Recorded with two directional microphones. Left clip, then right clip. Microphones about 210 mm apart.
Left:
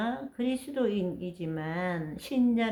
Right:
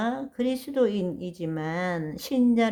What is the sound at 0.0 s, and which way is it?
Speech, 40° right (ahead or behind).